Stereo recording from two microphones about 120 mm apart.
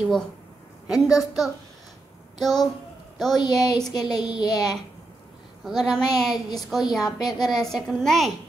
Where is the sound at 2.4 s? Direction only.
Centre (ahead or behind).